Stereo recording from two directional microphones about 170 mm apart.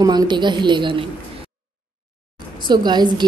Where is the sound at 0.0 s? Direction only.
25° right (ahead or behind).